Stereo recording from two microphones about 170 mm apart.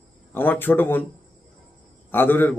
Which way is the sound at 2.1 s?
10° left (ahead or behind).